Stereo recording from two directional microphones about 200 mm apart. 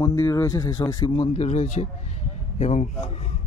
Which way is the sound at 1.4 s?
35° left (ahead or behind).